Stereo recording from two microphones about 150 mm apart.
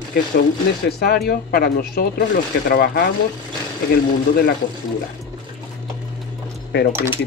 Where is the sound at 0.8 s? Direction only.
90° left.